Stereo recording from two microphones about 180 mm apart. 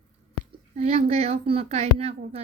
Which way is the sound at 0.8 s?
35° right (ahead or behind).